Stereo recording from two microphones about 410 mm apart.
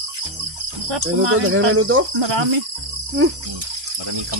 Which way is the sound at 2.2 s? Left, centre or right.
Right.